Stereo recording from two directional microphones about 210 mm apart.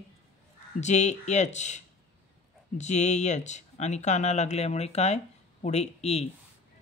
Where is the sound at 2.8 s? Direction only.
35° left (ahead or behind).